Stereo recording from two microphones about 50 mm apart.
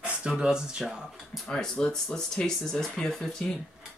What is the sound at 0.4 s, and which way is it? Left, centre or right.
Speech, centre.